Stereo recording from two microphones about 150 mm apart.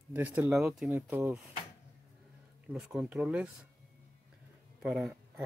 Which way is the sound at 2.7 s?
5° right (ahead or behind).